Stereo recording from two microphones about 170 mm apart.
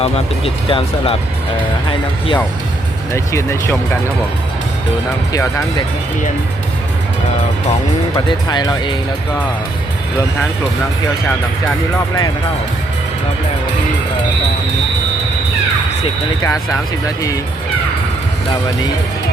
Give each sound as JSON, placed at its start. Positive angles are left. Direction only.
{"t": 0.0, "sound": "speech", "side_deg": 35}
{"t": 3.1, "sound": "speech", "side_deg": 15}
{"t": 5.3, "sound": "speech", "side_deg": 15}
{"t": 8.1, "sound": "speech", "side_deg": 25}
{"t": 16.4, "sound": "speech", "side_deg": 20}